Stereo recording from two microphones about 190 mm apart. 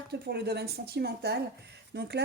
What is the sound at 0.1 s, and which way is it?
Speech, 60° right (ahead or behind).